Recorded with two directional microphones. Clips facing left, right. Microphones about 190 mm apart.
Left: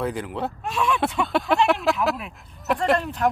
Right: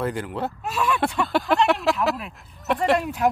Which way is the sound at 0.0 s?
Centre (ahead or behind).